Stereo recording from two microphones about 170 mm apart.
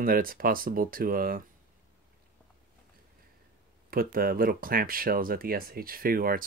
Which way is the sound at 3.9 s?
60° right (ahead or behind).